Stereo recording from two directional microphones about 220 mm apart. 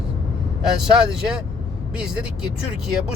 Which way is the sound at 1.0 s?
5° right (ahead or behind).